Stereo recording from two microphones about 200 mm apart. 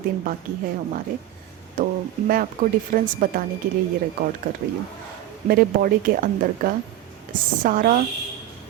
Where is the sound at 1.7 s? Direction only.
45° right (ahead or behind).